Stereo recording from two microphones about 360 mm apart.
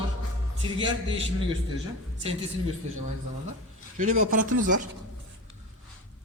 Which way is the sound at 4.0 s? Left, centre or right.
Right.